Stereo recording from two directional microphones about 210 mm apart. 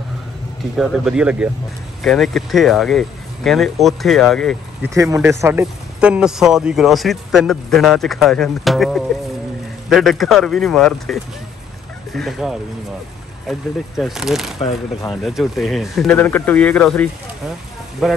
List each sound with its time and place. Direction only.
0.7 s speech: centre (ahead or behind)
4.9 s speech: 15° right (ahead or behind)
14.6 s speech: 20° left (ahead or behind)
15.2 s speech: centre (ahead or behind)